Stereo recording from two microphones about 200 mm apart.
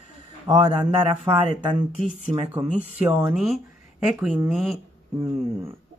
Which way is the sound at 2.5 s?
10° right (ahead or behind).